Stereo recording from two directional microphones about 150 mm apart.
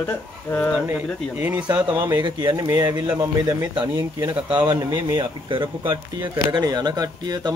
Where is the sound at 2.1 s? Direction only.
30° right (ahead or behind).